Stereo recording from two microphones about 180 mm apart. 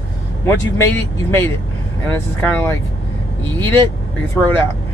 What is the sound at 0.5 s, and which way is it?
Speech, 15° left (ahead or behind).